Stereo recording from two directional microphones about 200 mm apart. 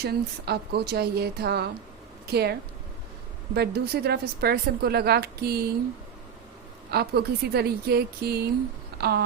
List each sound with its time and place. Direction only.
0.0 s a woman's voice: 55° right (ahead or behind)
6.9 s a woman's voice: 55° right (ahead or behind)
9.0 s a sound: 50° right (ahead or behind)